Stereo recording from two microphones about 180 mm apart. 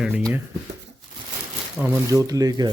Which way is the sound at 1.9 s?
20° right (ahead or behind).